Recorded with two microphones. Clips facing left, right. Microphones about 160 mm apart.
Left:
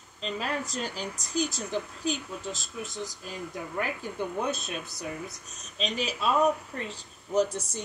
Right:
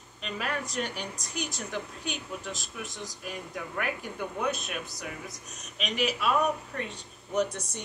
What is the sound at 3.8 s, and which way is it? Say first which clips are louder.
Speech: left 2 dB; 30° left (ahead or behind).